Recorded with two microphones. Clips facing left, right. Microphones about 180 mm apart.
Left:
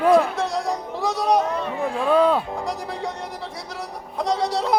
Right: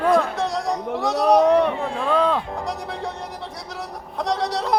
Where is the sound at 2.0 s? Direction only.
10° left (ahead or behind).